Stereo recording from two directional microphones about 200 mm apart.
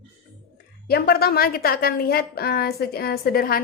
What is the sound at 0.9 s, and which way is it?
A woman's voice, 50° left (ahead or behind).